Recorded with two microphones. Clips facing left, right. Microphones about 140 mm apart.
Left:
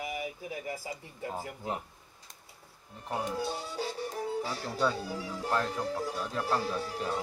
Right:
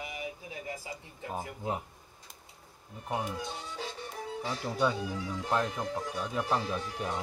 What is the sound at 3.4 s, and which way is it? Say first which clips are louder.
Speech: left 5 dB; 35° left (ahead or behind).